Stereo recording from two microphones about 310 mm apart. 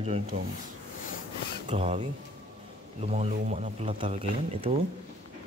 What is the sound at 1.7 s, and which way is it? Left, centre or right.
Speech, centre.